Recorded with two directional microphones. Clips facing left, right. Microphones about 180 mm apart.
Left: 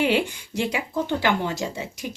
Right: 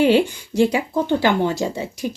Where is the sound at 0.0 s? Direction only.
35° right (ahead or behind).